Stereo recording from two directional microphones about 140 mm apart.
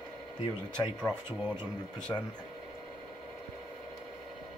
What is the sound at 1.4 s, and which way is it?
Speech, 15° right (ahead or behind).